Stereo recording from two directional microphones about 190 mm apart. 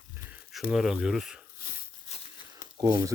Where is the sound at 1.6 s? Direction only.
50° left (ahead or behind).